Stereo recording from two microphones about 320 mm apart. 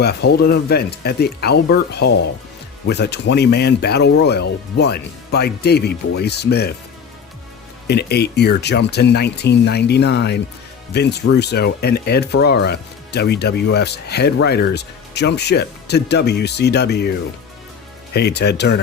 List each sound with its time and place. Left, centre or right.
0.0 s speech: left
7.9 s speech: left